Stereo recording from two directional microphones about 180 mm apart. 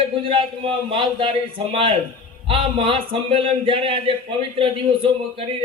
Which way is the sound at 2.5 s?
30° right (ahead or behind).